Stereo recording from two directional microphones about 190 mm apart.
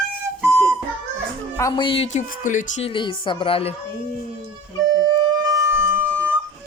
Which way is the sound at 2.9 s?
25° left (ahead or behind).